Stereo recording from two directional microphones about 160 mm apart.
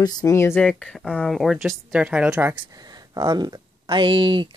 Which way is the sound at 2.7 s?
25° right (ahead or behind).